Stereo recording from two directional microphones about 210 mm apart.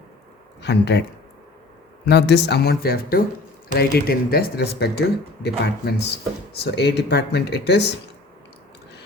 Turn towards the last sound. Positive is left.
turn(degrees=55)  # may be behind; listen again after turning